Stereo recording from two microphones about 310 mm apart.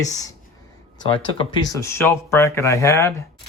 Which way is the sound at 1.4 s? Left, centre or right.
Centre.